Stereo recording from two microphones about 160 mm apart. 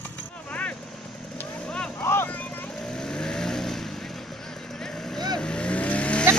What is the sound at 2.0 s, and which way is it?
Vehicle, 15° left (ahead or behind).